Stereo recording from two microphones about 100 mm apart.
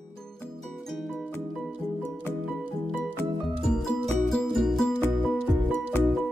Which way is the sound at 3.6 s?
5° left (ahead or behind).